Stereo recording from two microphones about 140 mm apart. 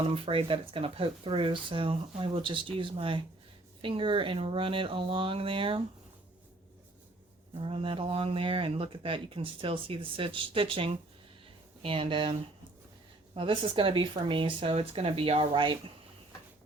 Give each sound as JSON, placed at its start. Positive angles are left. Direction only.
{"t": 0.3, "sound": "speech", "side_deg": -40}
{"t": 7.6, "sound": "speech", "side_deg": -40}